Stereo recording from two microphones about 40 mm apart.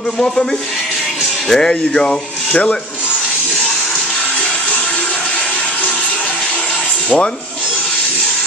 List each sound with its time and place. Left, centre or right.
1.5 s speech: centre